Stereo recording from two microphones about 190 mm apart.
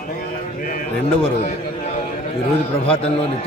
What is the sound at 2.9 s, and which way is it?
Speech, 30° left (ahead or behind).